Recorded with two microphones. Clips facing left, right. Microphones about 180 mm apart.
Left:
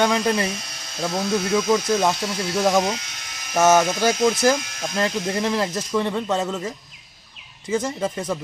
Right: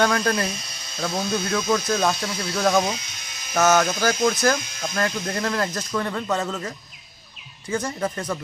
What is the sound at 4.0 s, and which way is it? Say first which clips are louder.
Speech: left 2 dB; 25° left (ahead or behind).